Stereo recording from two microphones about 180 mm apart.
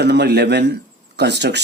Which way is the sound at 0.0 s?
70° right (ahead or behind).